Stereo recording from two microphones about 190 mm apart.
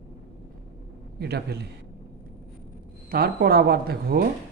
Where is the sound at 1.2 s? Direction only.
60° right (ahead or behind).